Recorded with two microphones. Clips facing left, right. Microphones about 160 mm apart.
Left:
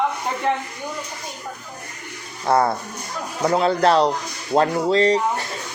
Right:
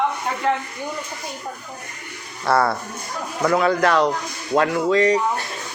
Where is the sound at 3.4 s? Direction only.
30° left (ahead or behind).